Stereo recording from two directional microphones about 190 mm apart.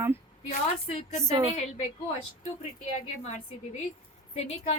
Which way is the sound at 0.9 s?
30° left (ahead or behind).